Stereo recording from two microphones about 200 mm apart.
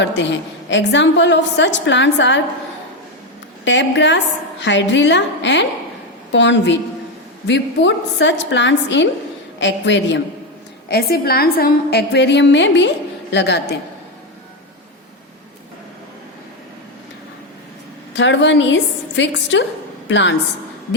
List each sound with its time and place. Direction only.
0.0 s a woman's voice: 65° left (ahead or behind)
3.6 s a woman's voice: 65° left (ahead or behind)
10.8 s a woman's voice: 50° left (ahead or behind)
18.1 s a woman's voice: 65° left (ahead or behind)